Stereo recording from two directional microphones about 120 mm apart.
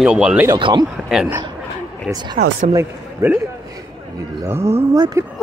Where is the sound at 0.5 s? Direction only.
45° right (ahead or behind).